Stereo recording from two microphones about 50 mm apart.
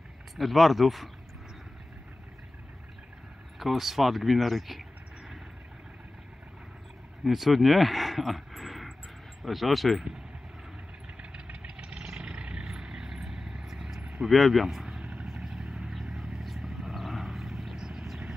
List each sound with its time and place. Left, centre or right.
0.4 s speech: centre
3.5 s speech: centre
7.2 s speech: centre
11.6 s vehicle: centre
14.3 s speech: centre
15.0 s vehicle: centre